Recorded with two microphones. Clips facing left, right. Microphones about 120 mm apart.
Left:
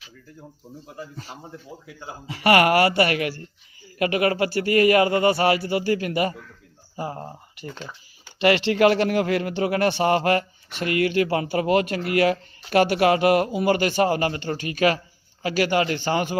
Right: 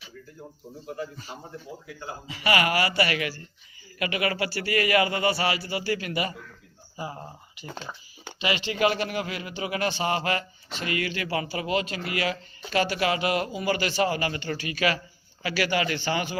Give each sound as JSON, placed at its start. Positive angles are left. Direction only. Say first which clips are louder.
{"t": 2.2, "sound": "speech", "louder": "left 7 dB", "side_deg": 60}
{"t": 8.4, "sound": "speech", "louder": "left 7 dB", "side_deg": 70}